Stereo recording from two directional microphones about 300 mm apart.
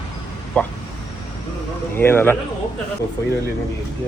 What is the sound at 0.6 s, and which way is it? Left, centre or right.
Speech, centre.